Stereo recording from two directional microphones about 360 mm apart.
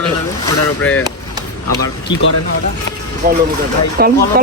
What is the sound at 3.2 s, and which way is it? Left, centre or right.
Speech, right.